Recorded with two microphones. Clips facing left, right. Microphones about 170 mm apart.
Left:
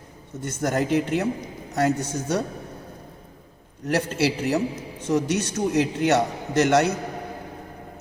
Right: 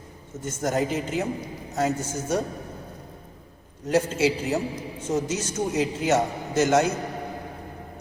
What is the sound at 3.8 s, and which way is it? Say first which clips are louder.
A man's voice: right 1 dB; 70° left (ahead or behind).